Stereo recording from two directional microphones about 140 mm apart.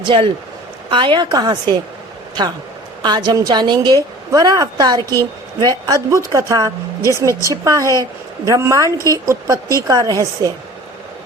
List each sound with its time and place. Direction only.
0.0 s a woman's voice: 40° right (ahead or behind)
3.0 s a woman's voice: 30° right (ahead or behind)